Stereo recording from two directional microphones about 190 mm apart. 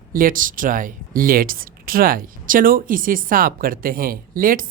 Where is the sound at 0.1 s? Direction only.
45° right (ahead or behind).